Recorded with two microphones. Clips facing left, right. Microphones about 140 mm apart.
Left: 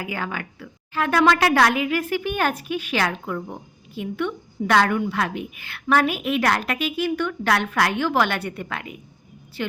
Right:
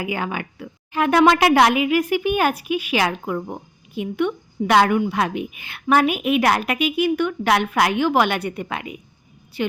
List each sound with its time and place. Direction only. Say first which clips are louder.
0.0 s a woman's voice: right 4 dB; 15° right (ahead or behind)